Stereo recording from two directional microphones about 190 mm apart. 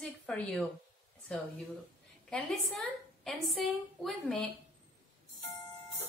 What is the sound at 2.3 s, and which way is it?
A woman's voice, centre (ahead or behind).